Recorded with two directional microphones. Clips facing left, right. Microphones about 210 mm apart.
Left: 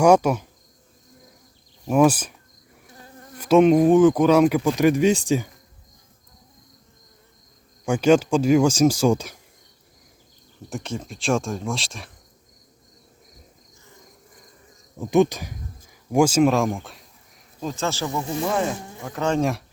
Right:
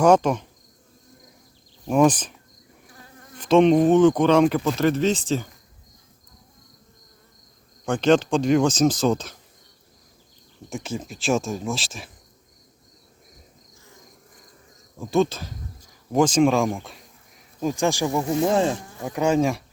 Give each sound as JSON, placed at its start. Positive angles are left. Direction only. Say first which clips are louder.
{"t": 0.0, "sound": "speech", "louder": "left 1 dB", "side_deg": 10}
{"t": 1.9, "sound": "speech", "louder": "left 1 dB", "side_deg": 5}
{"t": 3.3, "sound": "speech", "louder": "left 1 dB", "side_deg": 10}
{"t": 7.9, "sound": "speech", "louder": "left 1 dB", "side_deg": 10}
{"t": 10.7, "sound": "speech", "louder": "even", "side_deg": 0}
{"t": 14.9, "sound": "speech", "louder": "left 3 dB", "side_deg": 20}
{"t": 17.6, "sound": "speech", "louder": "right 4 dB", "side_deg": -15}
{"t": 18.2, "sound": "speech", "louder": "right 3 dB", "side_deg": -30}
{"t": 19.0, "sound": "speech", "louder": "right 2 dB", "side_deg": -10}